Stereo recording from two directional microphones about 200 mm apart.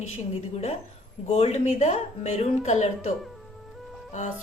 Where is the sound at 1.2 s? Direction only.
35° left (ahead or behind).